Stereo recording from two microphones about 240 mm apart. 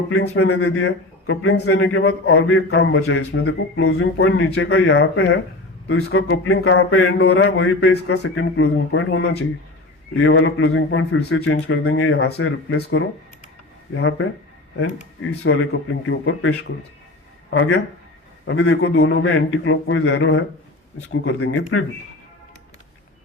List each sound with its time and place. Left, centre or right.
0.1 s a man's voice: left
17.5 s a man's voice: left